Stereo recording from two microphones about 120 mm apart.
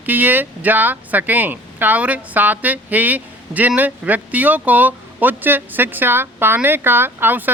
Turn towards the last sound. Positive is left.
turn(degrees=-15)  # may be behind; listen again after turning